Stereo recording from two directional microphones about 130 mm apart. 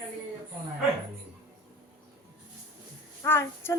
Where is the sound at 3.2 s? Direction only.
20° left (ahead or behind).